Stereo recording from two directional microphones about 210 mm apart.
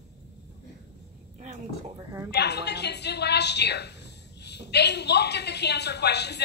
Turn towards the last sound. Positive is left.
turn(degrees=55)  # may be behind; listen again after turning